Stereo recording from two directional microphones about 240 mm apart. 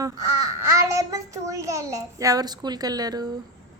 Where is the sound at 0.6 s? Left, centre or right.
Centre.